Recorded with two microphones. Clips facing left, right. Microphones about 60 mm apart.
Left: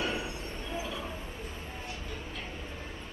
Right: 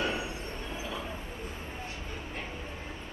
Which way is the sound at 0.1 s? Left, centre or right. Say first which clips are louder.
Right 1 dB; centre.